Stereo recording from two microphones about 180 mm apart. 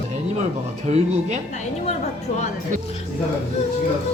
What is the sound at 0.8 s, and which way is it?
Speech, 40° right (ahead or behind).